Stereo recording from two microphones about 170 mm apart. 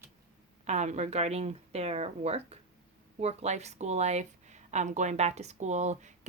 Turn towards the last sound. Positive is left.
turn(degrees=-45)  # may be behind; listen again after turning